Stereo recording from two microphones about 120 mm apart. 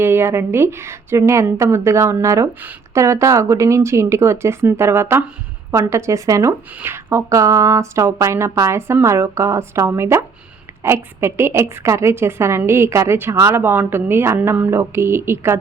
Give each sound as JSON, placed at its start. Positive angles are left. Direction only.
{"t": 0.0, "sound": "a woman's voice", "side_deg": -20}